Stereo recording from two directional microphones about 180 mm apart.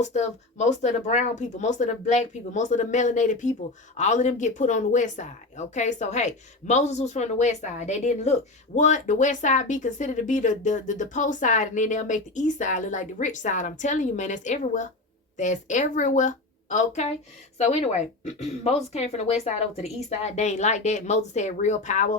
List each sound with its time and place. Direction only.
0.0 s speech: 40° left (ahead or behind)